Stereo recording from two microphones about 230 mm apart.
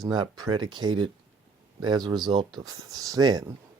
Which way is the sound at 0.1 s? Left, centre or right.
Centre.